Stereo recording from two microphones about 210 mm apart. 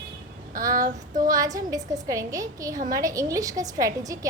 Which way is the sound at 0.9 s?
40° right (ahead or behind).